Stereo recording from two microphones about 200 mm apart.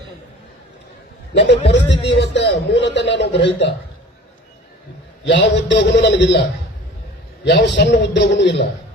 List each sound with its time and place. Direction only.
1.3 s a man's voice: 60° left (ahead or behind)
5.2 s a man's voice: 60° left (ahead or behind)
7.4 s a man's voice: 60° left (ahead or behind)